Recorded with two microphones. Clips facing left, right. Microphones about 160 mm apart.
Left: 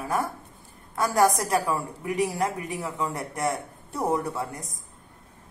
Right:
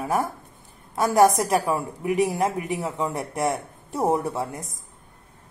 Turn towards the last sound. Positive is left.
turn(degrees=-25)  # may be behind; listen again after turning